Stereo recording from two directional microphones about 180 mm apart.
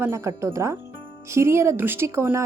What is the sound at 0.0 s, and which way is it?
A woman's voice, 15° right (ahead or behind).